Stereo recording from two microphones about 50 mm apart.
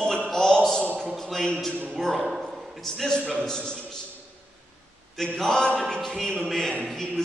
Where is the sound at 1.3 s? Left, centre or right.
Centre.